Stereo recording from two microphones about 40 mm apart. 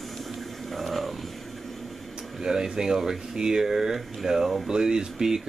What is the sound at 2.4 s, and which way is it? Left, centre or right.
Speech, centre.